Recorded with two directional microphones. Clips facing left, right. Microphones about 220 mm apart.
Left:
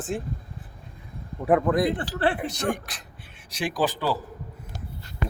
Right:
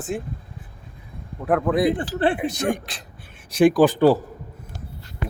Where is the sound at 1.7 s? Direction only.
10° right (ahead or behind).